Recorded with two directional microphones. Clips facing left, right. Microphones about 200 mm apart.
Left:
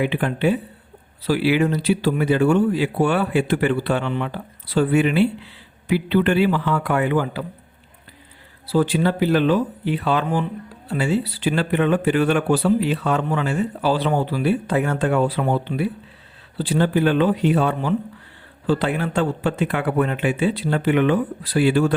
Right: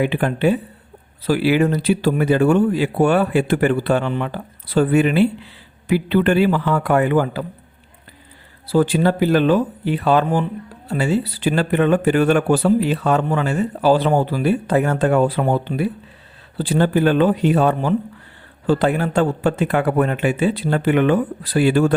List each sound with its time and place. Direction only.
0.0 s speech: 45° right (ahead or behind)
8.6 s speech: 45° right (ahead or behind)